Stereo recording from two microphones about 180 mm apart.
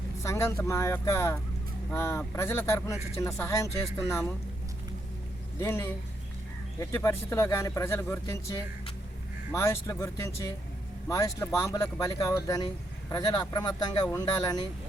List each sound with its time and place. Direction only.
0.2 s speech: 15° left (ahead or behind)
5.5 s speech: 15° left (ahead or behind)